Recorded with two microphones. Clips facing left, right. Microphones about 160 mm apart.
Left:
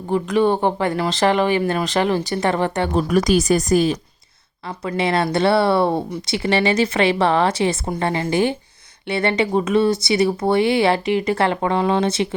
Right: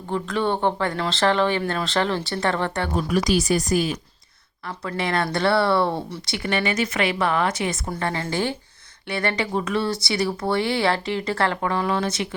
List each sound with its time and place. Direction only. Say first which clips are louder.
0.1 s speech: left 6 dB; 15° left (ahead or behind)
3.1 s speech: left 4 dB; 45° left (ahead or behind)
4.8 s speech: left 5 dB; 20° left (ahead or behind)